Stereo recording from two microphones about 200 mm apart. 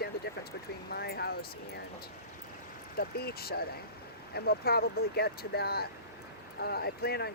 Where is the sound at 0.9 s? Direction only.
50° left (ahead or behind).